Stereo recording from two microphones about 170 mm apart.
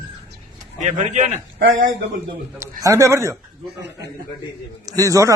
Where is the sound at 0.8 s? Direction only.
45° right (ahead or behind).